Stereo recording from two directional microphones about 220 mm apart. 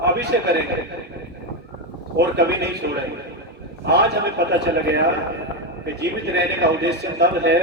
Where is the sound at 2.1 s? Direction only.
50° right (ahead or behind).